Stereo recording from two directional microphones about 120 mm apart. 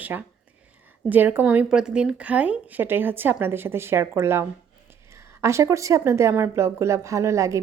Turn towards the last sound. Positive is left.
turn(degrees=-25)  # may be behind; listen again after turning